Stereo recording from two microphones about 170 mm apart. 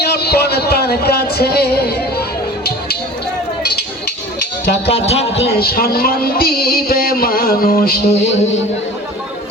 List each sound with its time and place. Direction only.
0.0 s speech: 70° left (ahead or behind)
4.9 s speech: 35° left (ahead or behind)
5.5 s a sound: 60° left (ahead or behind)
8.1 s speech: 40° left (ahead or behind)